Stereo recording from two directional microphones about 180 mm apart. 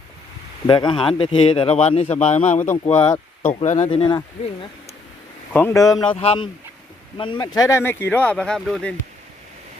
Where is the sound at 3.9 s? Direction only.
25° left (ahead or behind).